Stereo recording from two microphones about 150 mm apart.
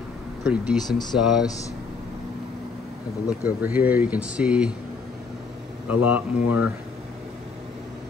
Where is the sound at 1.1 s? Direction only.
5° right (ahead or behind).